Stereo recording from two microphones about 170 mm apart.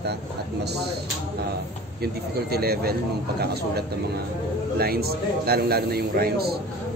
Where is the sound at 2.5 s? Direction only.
65° right (ahead or behind).